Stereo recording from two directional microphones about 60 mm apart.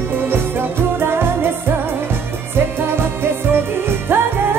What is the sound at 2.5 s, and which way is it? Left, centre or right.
Music, right.